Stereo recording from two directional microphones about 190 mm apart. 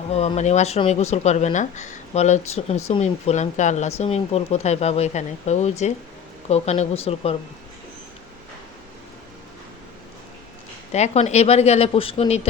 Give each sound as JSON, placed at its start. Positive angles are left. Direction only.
{"t": 0.1, "sound": "speech", "side_deg": 30}
{"t": 10.9, "sound": "speech", "side_deg": 35}